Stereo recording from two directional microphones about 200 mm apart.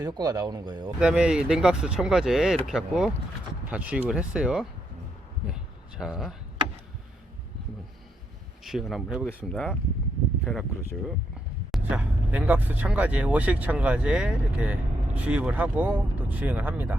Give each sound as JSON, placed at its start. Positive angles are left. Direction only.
{"t": 0.0, "sound": "speech", "side_deg": -20}
{"t": 0.9, "sound": "speech", "side_deg": -5}
{"t": 6.0, "sound": "speech", "side_deg": 0}
{"t": 8.6, "sound": "speech", "side_deg": 0}